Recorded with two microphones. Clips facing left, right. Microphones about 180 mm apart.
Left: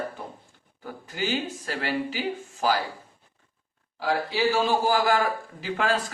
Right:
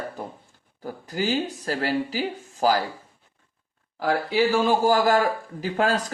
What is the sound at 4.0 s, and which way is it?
Speech, 50° right (ahead or behind).